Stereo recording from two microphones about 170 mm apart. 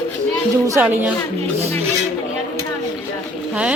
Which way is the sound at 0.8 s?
10° right (ahead or behind).